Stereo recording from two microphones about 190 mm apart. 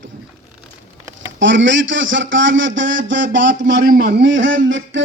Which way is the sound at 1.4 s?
75° right (ahead or behind).